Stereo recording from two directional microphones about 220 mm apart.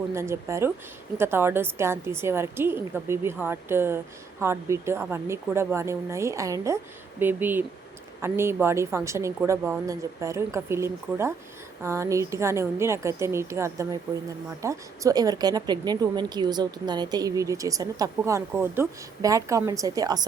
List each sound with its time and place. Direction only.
0.1 s speech: 10° right (ahead or behind)